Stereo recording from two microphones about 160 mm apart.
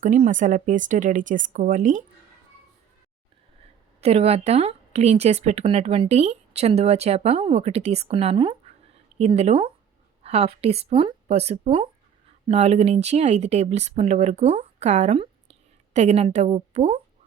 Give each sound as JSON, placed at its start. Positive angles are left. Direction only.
{"t": 0.0, "sound": "speech", "side_deg": -50}
{"t": 4.0, "sound": "speech", "side_deg": -40}